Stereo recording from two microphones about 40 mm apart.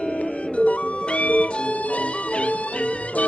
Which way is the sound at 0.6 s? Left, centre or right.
Left.